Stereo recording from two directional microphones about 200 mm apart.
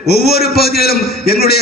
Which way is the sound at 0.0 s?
50° left (ahead or behind).